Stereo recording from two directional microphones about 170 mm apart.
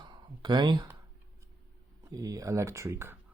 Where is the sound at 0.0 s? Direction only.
25° right (ahead or behind).